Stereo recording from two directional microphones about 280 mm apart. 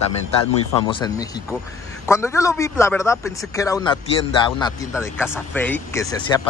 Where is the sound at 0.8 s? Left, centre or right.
Centre.